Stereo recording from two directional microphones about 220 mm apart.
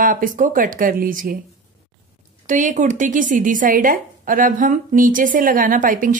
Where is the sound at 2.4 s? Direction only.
35° right (ahead or behind).